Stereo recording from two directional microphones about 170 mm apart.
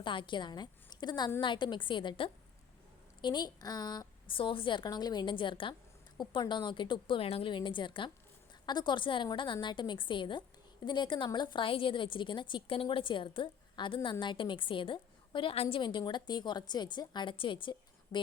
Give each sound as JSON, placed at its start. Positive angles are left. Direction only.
{"t": 0.0, "sound": "a woman's voice", "side_deg": 30}